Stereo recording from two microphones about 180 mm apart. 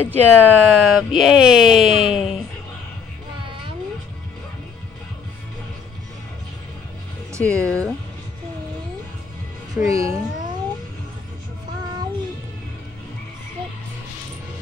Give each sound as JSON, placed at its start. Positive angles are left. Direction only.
{"t": 0.0, "sound": "speech", "side_deg": 10}
{"t": 7.4, "sound": "speech", "side_deg": 5}
{"t": 9.8, "sound": "music", "side_deg": -20}